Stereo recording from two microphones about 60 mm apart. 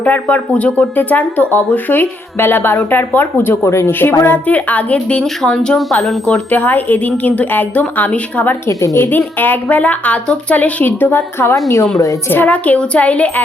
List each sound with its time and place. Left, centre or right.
0.0 s speech: left
3.7 s speech: left
4.3 s a woman's voice: left
5.2 s speech: centre
6.2 s a woman's voice: left
8.6 s a woman's voice: left
9.0 s a woman's voice: left